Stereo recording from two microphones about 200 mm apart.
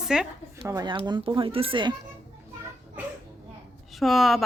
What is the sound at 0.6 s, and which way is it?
Speech, 20° right (ahead or behind).